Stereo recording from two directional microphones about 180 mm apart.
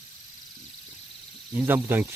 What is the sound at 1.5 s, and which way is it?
Speech, 10° right (ahead or behind).